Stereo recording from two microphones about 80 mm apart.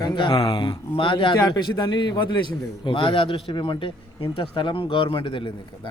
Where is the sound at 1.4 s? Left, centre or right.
Left.